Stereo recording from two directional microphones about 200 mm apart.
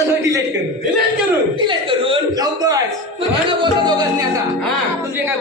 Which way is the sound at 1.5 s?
25° right (ahead or behind).